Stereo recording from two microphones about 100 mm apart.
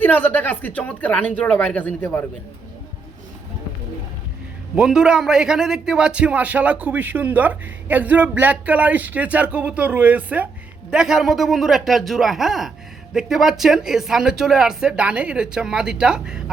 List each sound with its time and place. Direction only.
0.0 s speech: 20° left (ahead or behind)
4.7 s a man's voice: 5° right (ahead or behind)